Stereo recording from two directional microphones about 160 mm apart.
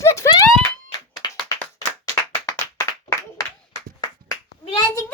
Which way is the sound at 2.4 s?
20° left (ahead or behind).